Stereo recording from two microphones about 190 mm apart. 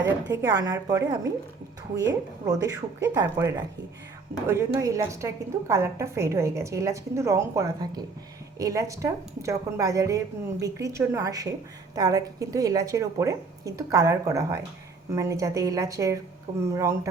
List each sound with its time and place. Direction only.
0.4 s speech: 20° right (ahead or behind)
2.5 s a woman's voice: 20° right (ahead or behind)